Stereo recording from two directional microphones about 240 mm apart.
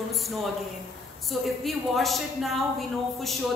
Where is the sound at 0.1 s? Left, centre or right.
Centre.